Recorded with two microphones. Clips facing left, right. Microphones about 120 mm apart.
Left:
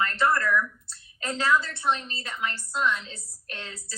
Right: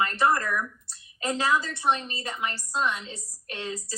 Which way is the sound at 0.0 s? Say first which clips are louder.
Right 1 dB; 20° right (ahead or behind).